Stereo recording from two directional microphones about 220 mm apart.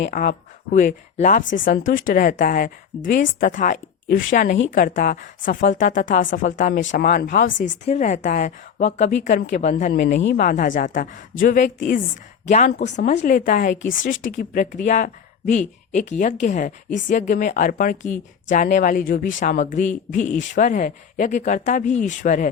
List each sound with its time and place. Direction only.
0.1 s speech: 35° left (ahead or behind)
10.2 s speech: 50° left (ahead or behind)
10.4 s speech: 35° left (ahead or behind)